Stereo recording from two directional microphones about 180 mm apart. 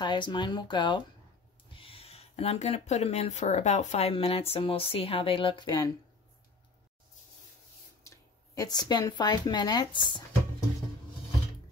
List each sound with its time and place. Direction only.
0.0 s speech: 25° left (ahead or behind)
8.5 s speech: 20° left (ahead or behind)